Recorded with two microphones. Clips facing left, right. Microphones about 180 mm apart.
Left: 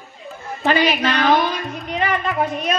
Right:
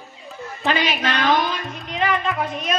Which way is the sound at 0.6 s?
45° left (ahead or behind).